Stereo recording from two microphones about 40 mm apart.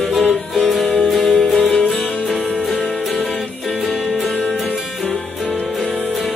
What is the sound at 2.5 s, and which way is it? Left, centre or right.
Music, centre.